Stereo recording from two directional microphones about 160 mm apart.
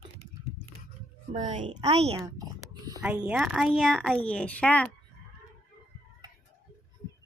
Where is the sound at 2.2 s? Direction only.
20° right (ahead or behind).